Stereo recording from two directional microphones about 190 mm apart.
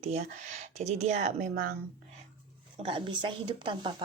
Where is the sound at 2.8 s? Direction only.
30° right (ahead or behind).